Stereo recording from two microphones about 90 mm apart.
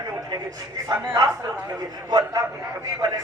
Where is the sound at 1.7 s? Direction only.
45° right (ahead or behind).